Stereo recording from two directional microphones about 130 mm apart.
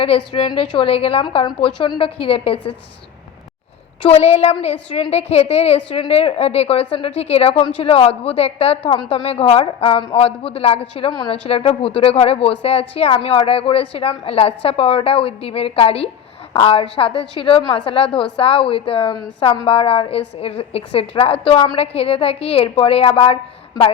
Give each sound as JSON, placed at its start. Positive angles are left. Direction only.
{"t": 0.0, "sound": "speech", "side_deg": 45}
{"t": 4.1, "sound": "a woman's voice", "side_deg": 55}